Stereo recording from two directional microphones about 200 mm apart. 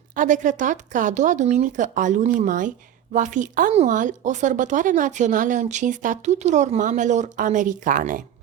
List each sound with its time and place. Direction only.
0.2 s speech: 40° right (ahead or behind)